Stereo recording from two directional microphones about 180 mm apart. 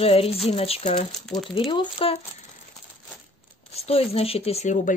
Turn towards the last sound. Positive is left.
turn(degrees=40)  # may be behind; listen again after turning